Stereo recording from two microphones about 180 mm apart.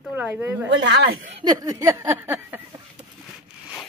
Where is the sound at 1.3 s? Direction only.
20° right (ahead or behind).